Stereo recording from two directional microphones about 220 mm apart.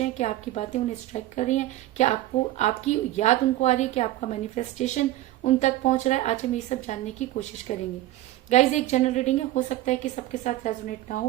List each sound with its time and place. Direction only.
0.0 s a woman's voice: 30° left (ahead or behind)